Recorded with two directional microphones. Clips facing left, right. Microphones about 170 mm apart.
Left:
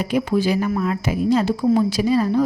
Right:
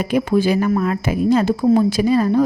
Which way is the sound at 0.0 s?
55° right (ahead or behind).